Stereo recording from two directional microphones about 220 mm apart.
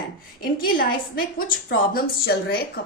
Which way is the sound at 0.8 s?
40° left (ahead or behind).